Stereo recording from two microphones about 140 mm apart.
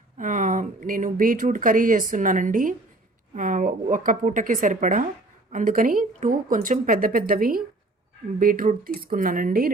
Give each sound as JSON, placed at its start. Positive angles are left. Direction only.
{"t": 0.2, "sound": "speech", "side_deg": -65}